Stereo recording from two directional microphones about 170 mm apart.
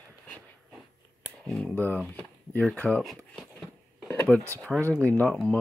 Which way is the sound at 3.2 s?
10° left (ahead or behind).